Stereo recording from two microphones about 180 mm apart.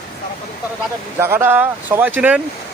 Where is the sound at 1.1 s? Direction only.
10° right (ahead or behind).